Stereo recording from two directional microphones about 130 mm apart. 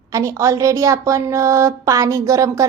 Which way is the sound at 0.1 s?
25° right (ahead or behind).